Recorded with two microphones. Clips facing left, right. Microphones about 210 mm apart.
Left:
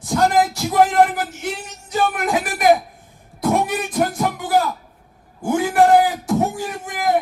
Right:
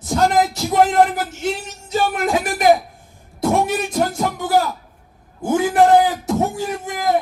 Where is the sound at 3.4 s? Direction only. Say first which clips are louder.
Right 1 dB; 25° right (ahead or behind).